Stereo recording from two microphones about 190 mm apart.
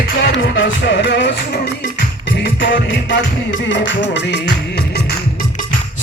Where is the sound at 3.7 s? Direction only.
70° left (ahead or behind).